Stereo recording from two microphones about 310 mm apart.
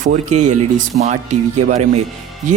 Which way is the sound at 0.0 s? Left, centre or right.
Right.